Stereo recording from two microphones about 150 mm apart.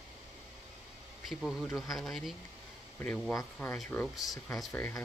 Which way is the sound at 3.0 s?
10° left (ahead or behind).